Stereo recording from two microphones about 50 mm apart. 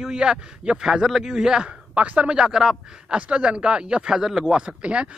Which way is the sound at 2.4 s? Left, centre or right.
Centre.